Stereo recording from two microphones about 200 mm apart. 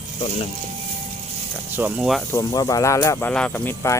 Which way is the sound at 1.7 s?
5° right (ahead or behind).